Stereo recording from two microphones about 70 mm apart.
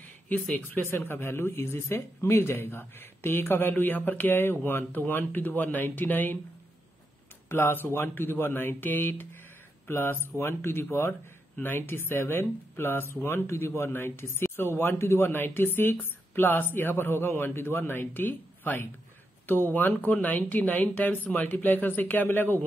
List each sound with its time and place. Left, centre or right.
0.3 s speech: left
7.4 s speech: left